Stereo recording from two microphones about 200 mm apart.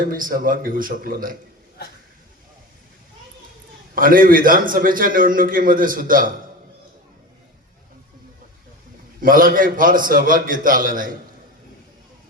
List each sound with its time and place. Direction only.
0.1 s a man's voice: 45° right (ahead or behind)
3.9 s a man's voice: 45° right (ahead or behind)
9.2 s a man's voice: 45° right (ahead or behind)